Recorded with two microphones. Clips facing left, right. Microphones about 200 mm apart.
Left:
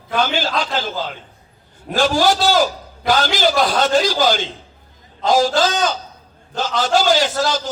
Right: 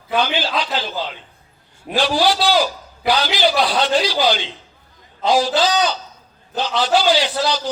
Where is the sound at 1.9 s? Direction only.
45° left (ahead or behind).